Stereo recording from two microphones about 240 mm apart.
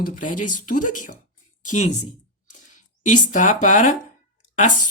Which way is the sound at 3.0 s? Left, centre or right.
Left.